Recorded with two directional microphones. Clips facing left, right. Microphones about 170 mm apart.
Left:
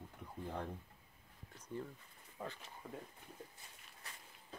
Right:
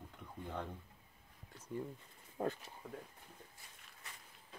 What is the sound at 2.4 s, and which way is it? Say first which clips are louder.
Speech: right 9 dB; 50° right (ahead or behind).